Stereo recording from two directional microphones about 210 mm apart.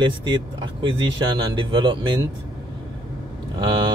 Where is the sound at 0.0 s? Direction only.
20° right (ahead or behind).